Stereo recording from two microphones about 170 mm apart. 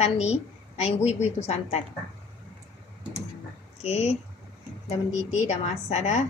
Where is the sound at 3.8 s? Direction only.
40° left (ahead or behind).